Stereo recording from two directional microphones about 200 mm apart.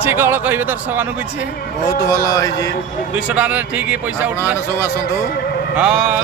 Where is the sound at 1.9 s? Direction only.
15° left (ahead or behind).